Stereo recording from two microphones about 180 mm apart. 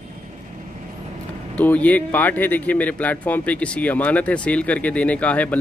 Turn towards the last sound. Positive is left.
turn(degrees=10)  # may be behind; listen again after turning